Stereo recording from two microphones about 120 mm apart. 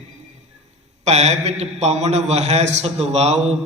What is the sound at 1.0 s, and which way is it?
A man's voice, 65° right (ahead or behind).